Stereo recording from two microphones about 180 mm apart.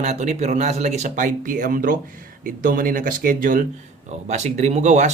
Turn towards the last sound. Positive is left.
turn(degrees=-40)  # may be behind; listen again after turning